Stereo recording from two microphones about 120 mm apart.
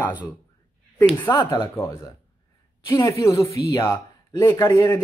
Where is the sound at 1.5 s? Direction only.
25° left (ahead or behind).